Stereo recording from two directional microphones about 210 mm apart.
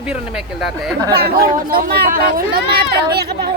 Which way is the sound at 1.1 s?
50° right (ahead or behind).